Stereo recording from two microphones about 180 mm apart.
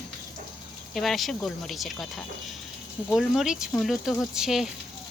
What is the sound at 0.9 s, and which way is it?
Speech, centre (ahead or behind).